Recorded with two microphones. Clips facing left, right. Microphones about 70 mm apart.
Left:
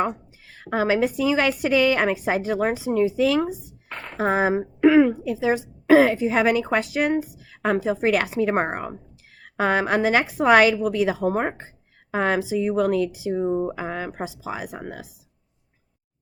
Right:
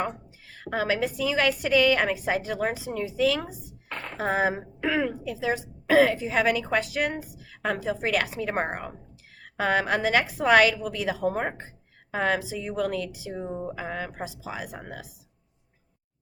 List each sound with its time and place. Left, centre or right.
0.5 s a woman's voice: left
3.9 s a sound: centre
4.2 s a woman's voice: left